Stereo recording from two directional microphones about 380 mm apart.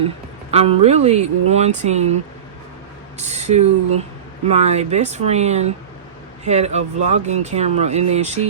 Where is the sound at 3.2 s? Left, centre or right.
Centre.